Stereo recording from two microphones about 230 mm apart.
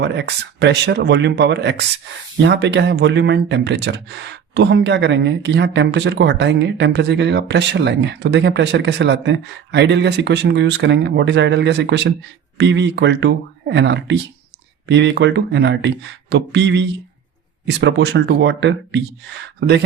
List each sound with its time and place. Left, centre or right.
0.0 s speech: right